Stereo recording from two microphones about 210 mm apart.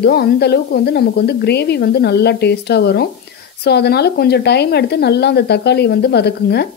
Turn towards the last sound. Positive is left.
turn(degrees=50)  # may be behind; listen again after turning